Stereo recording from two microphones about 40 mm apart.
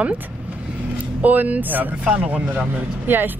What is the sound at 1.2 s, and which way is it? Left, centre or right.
Speech, right.